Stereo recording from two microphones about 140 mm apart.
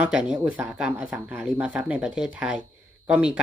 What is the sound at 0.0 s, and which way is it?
Speech, 5° right (ahead or behind).